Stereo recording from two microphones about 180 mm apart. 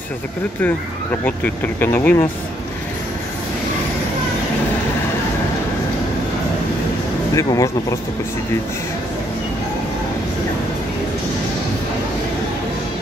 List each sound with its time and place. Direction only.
1.2 s speech: 10° left (ahead or behind)
7.3 s speech: 20° left (ahead or behind)